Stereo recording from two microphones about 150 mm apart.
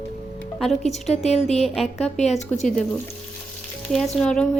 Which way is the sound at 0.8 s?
45° left (ahead or behind).